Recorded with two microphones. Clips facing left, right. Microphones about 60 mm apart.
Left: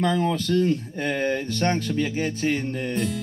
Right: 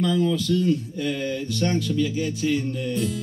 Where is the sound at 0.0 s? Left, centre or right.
Left.